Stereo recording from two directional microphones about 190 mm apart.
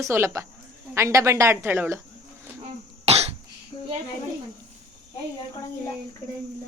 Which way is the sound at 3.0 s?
35° right (ahead or behind).